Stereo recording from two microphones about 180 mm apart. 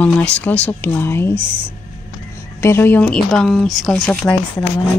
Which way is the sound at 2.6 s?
15° left (ahead or behind).